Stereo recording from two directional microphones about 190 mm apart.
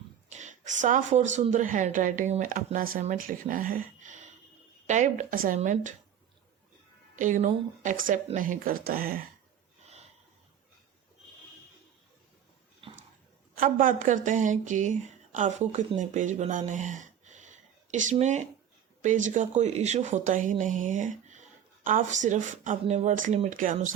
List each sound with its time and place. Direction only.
0.3 s speech: 40° right (ahead or behind)
7.2 s speech: 40° right (ahead or behind)
12.8 s a sound: 30° right (ahead or behind)
13.6 s speech: 45° right (ahead or behind)